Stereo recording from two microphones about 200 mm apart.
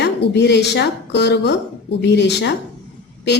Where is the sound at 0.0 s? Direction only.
60° left (ahead or behind).